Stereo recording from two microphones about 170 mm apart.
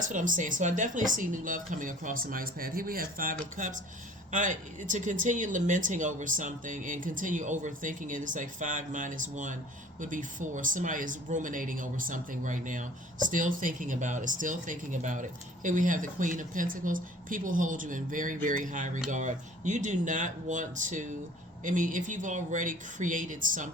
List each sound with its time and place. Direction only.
0.0 s speech: 50° right (ahead or behind)